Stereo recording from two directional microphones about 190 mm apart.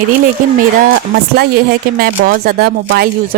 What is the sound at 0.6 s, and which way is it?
Speech, 55° right (ahead or behind).